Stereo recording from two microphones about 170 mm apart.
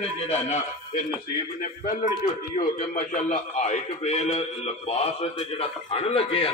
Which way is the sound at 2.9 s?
50° left (ahead or behind).